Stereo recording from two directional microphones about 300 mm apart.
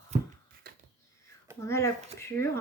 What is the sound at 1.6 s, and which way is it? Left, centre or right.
Speech, centre.